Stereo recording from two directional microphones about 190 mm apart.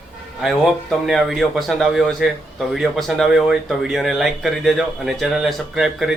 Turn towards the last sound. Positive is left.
turn(degrees=-5)  # may be behind; listen again after turning